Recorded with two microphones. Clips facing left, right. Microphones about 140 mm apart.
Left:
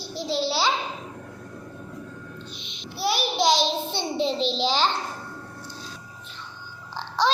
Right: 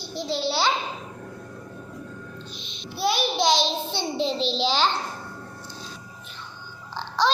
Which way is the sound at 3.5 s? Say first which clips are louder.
Left 1 dB; 40° left (ahead or behind).